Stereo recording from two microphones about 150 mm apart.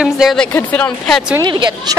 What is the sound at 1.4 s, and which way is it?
Speech, 30° right (ahead or behind).